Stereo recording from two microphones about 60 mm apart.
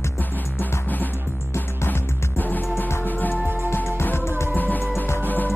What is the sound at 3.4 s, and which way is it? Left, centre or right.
Music, right.